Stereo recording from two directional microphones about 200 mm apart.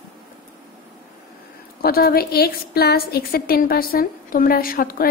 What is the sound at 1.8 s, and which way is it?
A woman's voice, 50° left (ahead or behind).